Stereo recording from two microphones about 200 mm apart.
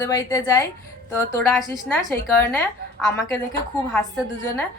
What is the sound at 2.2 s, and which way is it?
Speech, 10° left (ahead or behind).